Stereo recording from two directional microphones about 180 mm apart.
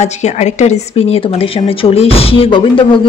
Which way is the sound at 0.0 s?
40° left (ahead or behind).